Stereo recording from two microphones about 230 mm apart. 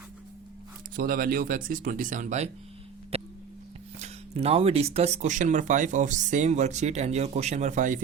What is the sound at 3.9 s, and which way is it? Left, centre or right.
Speech, right.